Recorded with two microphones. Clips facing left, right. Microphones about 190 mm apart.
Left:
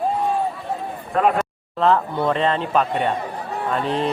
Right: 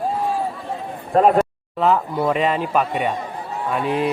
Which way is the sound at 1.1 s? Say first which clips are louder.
Right 4 dB; 40° right (ahead or behind).